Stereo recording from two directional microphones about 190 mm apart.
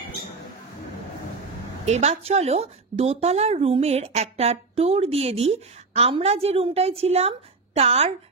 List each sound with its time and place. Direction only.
1.9 s a woman's voice: 35° right (ahead or behind)